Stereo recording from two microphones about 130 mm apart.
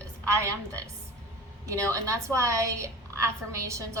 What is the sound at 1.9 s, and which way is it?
A woman's voice, 25° right (ahead or behind).